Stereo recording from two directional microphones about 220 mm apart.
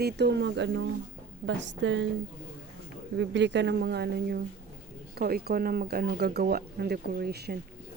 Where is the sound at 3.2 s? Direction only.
55° right (ahead or behind).